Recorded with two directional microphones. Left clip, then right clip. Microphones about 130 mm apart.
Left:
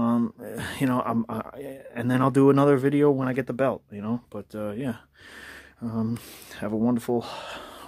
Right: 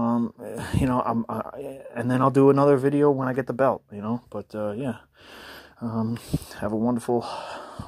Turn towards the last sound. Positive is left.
turn(degrees=5)  # may be behind; listen again after turning